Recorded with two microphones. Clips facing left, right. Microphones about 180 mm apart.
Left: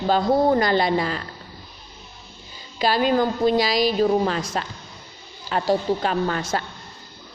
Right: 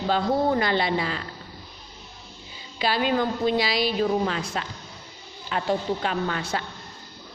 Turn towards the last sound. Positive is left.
turn(degrees=40)  # may be behind; listen again after turning